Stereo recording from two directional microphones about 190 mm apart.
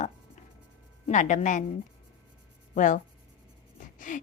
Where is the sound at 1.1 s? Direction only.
40° left (ahead or behind).